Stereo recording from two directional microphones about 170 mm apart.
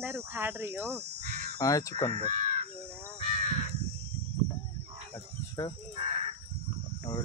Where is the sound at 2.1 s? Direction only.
45° right (ahead or behind).